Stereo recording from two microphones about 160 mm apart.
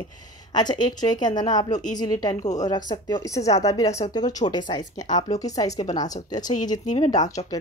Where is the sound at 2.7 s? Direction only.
25° left (ahead or behind).